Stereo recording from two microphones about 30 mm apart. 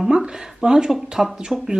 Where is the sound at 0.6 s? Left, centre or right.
Right.